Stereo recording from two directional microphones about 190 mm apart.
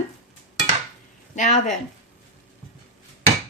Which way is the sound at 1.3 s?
40° left (ahead or behind).